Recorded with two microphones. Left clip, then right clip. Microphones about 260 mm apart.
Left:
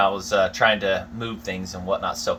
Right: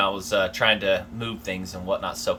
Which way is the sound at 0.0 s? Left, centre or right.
Centre.